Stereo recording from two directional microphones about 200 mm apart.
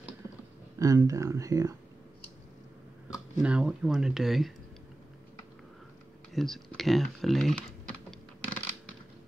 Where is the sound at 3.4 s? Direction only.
5° right (ahead or behind).